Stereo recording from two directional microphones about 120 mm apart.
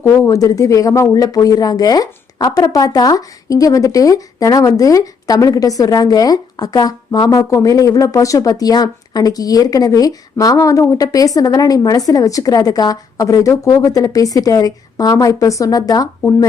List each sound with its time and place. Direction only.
0.0 s speech: 25° left (ahead or behind)